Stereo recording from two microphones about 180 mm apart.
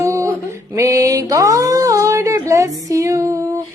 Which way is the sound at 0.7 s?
15° right (ahead or behind).